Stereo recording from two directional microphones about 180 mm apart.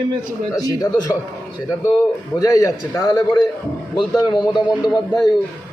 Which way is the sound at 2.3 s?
20° left (ahead or behind).